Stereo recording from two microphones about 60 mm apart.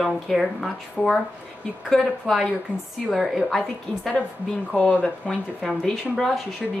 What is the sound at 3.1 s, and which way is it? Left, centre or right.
Speech, centre.